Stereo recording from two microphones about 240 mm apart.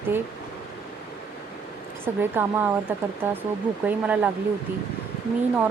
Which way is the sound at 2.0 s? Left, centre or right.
Centre.